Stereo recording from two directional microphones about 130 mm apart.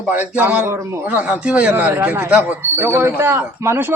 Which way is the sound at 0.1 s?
15° right (ahead or behind).